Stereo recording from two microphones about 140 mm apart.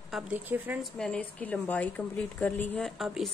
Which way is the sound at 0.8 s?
5° left (ahead or behind).